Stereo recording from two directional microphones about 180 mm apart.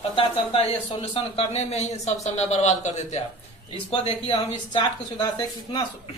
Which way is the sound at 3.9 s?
25° left (ahead or behind).